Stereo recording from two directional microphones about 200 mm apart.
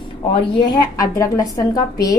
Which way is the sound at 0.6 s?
20° left (ahead or behind).